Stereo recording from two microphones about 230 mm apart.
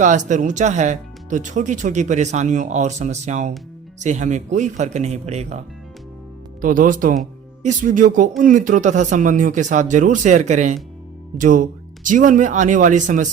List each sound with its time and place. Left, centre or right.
0.0 s speech: right
6.6 s speech: right